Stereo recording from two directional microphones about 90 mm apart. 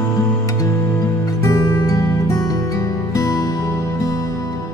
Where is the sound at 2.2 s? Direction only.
40° left (ahead or behind).